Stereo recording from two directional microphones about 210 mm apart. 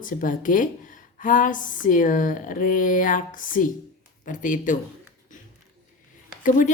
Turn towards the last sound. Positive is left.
turn(degrees=40)  # may be behind; listen again after turning